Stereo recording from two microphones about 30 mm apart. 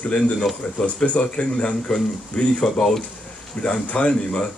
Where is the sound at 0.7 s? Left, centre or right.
Left.